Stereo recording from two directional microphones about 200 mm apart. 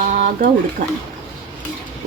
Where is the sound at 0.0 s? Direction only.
40° right (ahead or behind).